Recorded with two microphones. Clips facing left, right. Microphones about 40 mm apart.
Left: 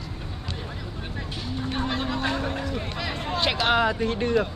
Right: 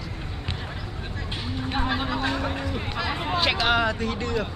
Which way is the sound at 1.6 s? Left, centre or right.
Centre.